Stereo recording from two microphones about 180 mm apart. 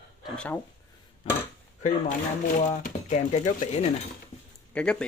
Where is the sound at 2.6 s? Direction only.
45° left (ahead or behind).